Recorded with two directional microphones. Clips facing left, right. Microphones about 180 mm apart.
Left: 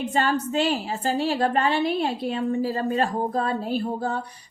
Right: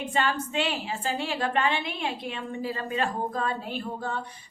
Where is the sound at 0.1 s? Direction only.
40° left (ahead or behind).